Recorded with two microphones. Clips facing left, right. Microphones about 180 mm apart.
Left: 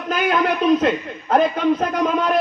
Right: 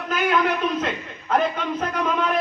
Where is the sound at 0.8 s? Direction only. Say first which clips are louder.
Left 8 dB; 40° left (ahead or behind).